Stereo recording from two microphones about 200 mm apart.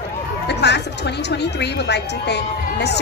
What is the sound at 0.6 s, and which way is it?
Speech, 60° left (ahead or behind).